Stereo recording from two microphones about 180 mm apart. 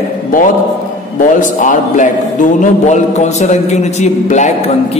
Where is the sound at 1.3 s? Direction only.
45° left (ahead or behind).